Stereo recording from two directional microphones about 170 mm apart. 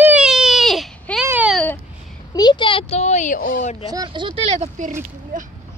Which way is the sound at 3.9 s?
25° right (ahead or behind).